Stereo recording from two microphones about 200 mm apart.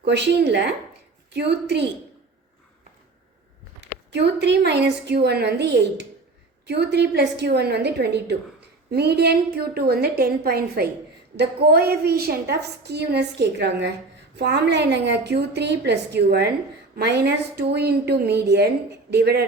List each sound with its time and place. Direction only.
0.0 s a woman's voice: 60° right (ahead or behind)
4.1 s a woman's voice: 60° right (ahead or behind)